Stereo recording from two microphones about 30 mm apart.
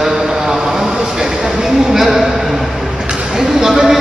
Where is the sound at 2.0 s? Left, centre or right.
Centre.